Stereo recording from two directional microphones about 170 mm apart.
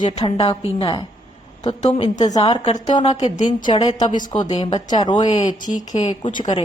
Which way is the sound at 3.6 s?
25° left (ahead or behind).